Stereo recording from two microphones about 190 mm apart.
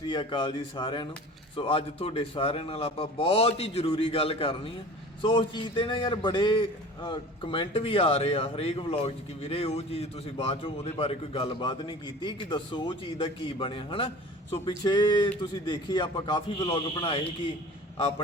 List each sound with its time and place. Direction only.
0.0 s a man's voice: 25° left (ahead or behind)